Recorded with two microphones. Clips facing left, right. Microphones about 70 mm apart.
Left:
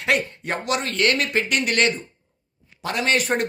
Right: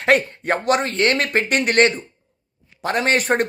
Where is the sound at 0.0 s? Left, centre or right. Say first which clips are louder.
Right 5 dB; right.